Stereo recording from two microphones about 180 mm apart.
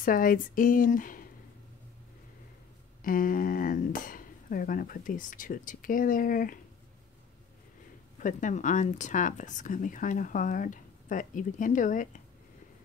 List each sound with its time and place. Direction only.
0.0 s speech: 50° left (ahead or behind)
3.0 s speech: 50° left (ahead or behind)
8.2 s speech: 45° left (ahead or behind)